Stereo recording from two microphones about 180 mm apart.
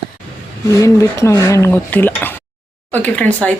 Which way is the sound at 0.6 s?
15° left (ahead or behind).